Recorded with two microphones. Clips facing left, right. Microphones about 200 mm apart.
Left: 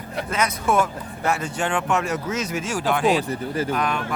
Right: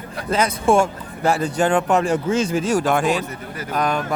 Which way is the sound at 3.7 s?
40° right (ahead or behind).